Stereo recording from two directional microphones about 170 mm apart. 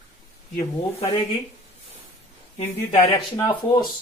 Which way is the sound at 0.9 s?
35° left (ahead or behind).